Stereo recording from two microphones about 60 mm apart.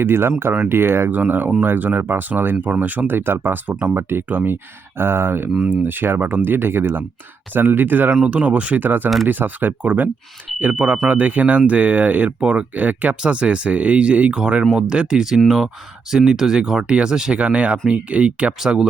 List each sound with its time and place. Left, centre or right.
0.0 s speech: right
1.1 s speech: right
2.7 s speech: right
8.1 s speech: centre
12.4 s speech: centre
12.7 s speech: right
18.6 s speech: centre